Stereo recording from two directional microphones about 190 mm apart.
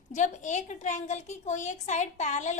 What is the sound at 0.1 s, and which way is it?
A woman's voice, 40° left (ahead or behind).